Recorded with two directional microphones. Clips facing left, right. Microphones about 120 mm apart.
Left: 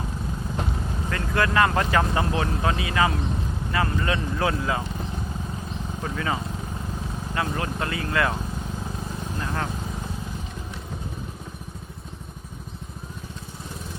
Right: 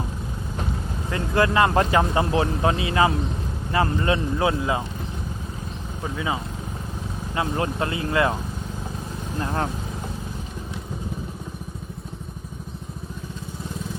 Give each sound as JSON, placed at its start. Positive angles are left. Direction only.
{"t": 1.1, "sound": "speech", "side_deg": -25}
{"t": 6.0, "sound": "speech", "side_deg": -15}
{"t": 7.3, "sound": "speech", "side_deg": -25}